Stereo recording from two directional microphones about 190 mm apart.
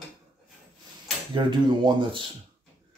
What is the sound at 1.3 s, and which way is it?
Speech, 25° right (ahead or behind).